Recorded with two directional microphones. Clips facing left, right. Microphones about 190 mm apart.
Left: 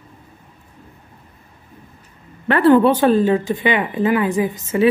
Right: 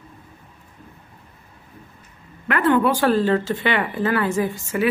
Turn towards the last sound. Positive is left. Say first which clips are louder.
# left 3 dB
turn(degrees=20)  # may be behind; listen again after turning